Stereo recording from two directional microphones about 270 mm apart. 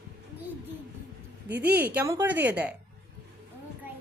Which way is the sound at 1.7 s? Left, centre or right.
Centre.